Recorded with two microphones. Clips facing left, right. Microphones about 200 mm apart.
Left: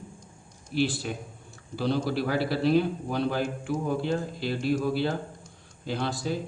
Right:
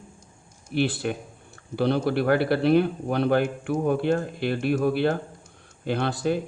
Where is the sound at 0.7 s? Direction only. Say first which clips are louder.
Right 3 dB; 60° right (ahead or behind).